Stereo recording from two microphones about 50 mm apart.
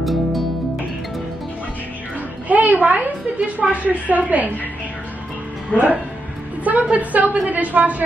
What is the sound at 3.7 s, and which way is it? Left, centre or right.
Speech, right.